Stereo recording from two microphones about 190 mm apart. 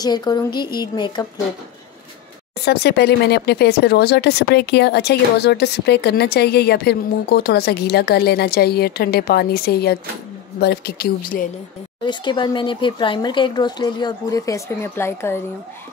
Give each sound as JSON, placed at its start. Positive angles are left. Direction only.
{"t": 0.0, "sound": "speech", "side_deg": 20}
{"t": 2.6, "sound": "speech", "side_deg": 60}
{"t": 12.0, "sound": "speech", "side_deg": 25}